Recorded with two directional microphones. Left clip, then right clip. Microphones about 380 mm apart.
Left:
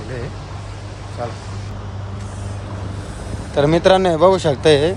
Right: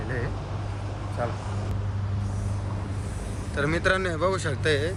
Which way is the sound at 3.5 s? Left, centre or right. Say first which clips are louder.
Left 11 dB; centre.